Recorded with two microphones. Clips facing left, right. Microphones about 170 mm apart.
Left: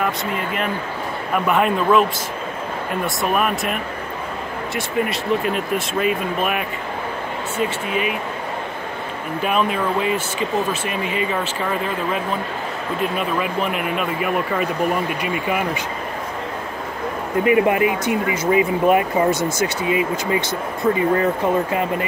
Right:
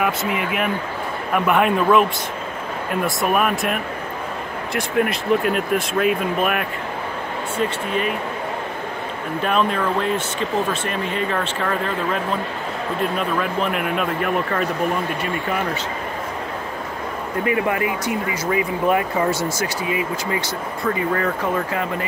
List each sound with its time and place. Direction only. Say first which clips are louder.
0.0 s speech: right 1 dB; 5° right (ahead or behind)
3.2 s speech: even; centre (ahead or behind)
5.1 s speech: right 1 dB; centre (ahead or behind)
7.9 s speech: even; 5° left (ahead or behind)
9.4 s speech: even; 5° left (ahead or behind)
17.5 s speech: left 5 dB; 20° left (ahead or behind)